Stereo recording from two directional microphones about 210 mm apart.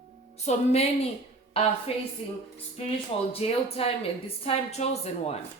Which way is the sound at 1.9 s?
30° left (ahead or behind).